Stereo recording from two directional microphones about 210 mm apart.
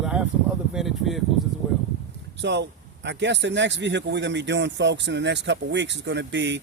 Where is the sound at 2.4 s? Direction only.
55° right (ahead or behind).